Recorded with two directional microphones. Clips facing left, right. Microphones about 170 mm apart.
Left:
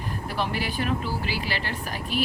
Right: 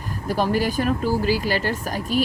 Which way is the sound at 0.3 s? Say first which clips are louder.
Right 8 dB; 40° right (ahead or behind).